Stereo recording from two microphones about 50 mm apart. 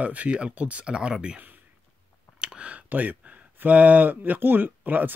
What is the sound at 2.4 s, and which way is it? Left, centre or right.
Speech, right.